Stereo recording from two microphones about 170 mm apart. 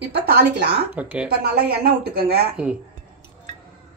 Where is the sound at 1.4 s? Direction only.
70° right (ahead or behind).